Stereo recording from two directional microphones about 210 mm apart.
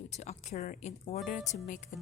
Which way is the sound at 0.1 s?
30° left (ahead or behind).